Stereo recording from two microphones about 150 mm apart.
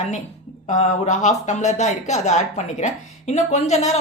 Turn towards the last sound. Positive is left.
turn(degrees=50)  # may be behind; listen again after turning